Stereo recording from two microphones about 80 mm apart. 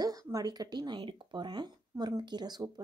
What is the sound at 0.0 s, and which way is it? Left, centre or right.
A woman's voice, right.